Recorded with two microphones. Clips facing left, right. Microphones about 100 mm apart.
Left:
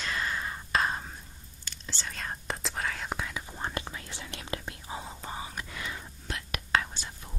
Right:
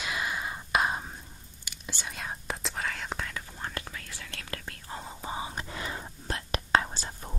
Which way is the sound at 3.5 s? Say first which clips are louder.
Left 3 dB; 20° left (ahead or behind).